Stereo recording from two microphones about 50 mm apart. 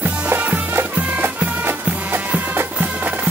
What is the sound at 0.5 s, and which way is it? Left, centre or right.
Music, right.